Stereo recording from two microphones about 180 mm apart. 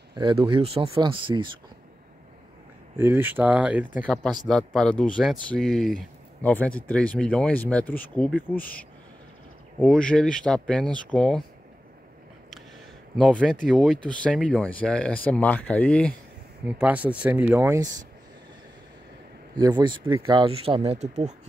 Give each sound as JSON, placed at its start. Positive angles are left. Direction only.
{"t": 0.1, "sound": "speech", "side_deg": -25}
{"t": 3.0, "sound": "speech", "side_deg": -10}
{"t": 4.1, "sound": "speech", "side_deg": 5}
{"t": 9.8, "sound": "speech", "side_deg": 5}
{"t": 13.1, "sound": "speech", "side_deg": 5}
{"t": 16.6, "sound": "speech", "side_deg": -5}
{"t": 19.6, "sound": "speech", "side_deg": -25}